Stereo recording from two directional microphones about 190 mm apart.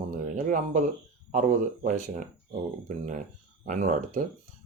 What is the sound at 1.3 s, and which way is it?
Speech, 40° right (ahead or behind).